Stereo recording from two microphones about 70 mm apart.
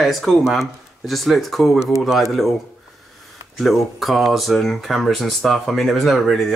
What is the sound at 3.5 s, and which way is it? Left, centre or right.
Speech, centre.